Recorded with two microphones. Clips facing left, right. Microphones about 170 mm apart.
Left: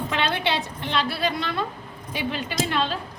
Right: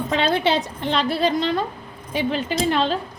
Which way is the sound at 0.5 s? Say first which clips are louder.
Right 4 dB; 45° right (ahead or behind).